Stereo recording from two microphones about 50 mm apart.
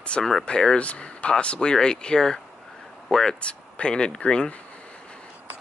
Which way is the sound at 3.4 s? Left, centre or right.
Left.